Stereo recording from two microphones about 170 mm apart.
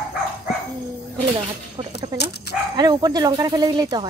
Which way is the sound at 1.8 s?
25° right (ahead or behind).